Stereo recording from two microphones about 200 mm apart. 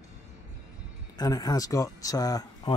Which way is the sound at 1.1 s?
20° left (ahead or behind).